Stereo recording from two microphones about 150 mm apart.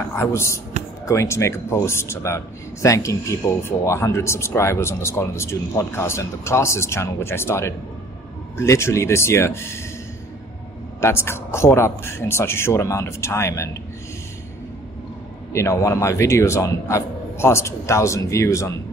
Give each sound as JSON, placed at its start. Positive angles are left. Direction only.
{"t": 0.1, "sound": "a man's voice", "side_deg": 15}
{"t": 11.0, "sound": "a man's voice", "side_deg": 15}
{"t": 15.5, "sound": "a man's voice", "side_deg": 20}